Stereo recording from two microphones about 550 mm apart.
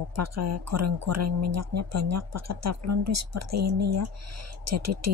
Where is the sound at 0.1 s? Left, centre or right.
Right.